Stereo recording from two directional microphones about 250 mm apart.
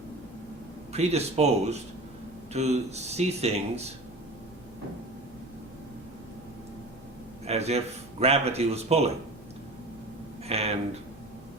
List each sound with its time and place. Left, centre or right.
0.9 s a man's voice: right
7.4 s a man's voice: right
10.5 s a man's voice: right